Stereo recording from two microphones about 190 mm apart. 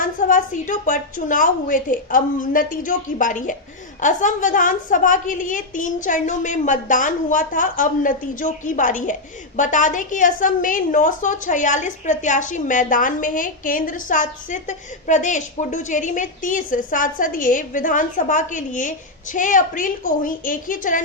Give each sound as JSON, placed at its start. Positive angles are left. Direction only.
{"t": 0.0, "sound": "a woman's voice", "side_deg": 45}